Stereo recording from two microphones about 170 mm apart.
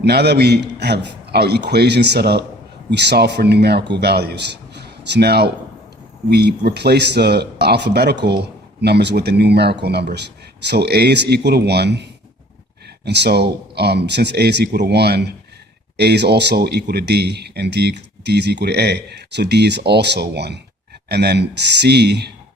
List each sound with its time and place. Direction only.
0.0 s speech: 75° right (ahead or behind)
13.1 s speech: 75° right (ahead or behind)